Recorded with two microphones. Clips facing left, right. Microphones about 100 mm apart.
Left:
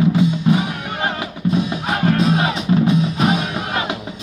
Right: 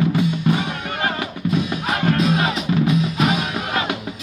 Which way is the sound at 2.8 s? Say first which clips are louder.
Left 2 dB; 35° left (ahead or behind).